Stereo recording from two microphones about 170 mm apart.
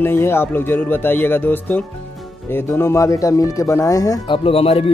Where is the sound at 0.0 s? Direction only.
15° left (ahead or behind).